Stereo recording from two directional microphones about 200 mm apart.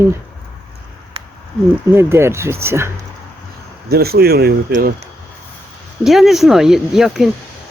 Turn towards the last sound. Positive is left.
turn(degrees=0)  # may be behind; listen again after turning